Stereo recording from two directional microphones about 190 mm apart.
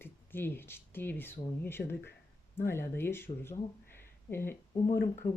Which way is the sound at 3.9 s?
10° left (ahead or behind).